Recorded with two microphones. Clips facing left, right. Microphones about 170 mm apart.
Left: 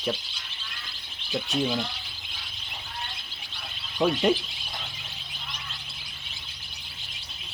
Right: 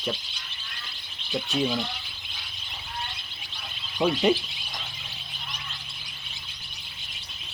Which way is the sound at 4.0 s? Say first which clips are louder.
Even; 5° right (ahead or behind).